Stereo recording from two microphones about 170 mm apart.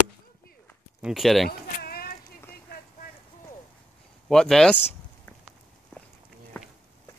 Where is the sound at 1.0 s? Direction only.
5° right (ahead or behind).